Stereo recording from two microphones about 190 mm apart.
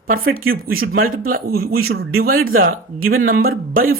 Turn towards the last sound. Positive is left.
turn(degrees=-50)  # may be behind; listen again after turning